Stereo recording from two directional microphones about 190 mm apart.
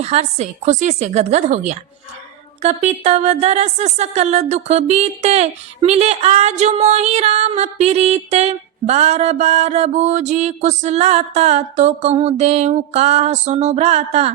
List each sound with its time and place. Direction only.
0.0 s speech: 35° right (ahead or behind)